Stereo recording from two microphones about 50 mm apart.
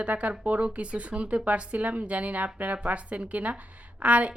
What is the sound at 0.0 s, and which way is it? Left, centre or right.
A woman's voice, right.